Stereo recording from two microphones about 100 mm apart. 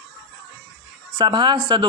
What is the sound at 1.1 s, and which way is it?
Speech, 50° right (ahead or behind).